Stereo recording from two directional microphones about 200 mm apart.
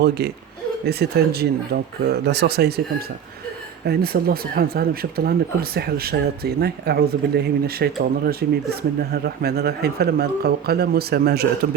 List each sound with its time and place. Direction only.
0.0 s speech: 55° right (ahead or behind)
3.8 s speech: 50° right (ahead or behind)